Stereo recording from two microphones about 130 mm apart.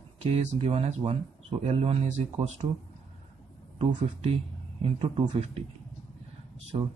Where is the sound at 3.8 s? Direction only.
50° right (ahead or behind).